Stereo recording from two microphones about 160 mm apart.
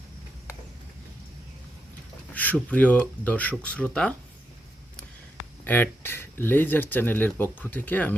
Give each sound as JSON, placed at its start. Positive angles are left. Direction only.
{"t": 2.3, "sound": "speech", "side_deg": 10}
{"t": 5.6, "sound": "speech", "side_deg": 10}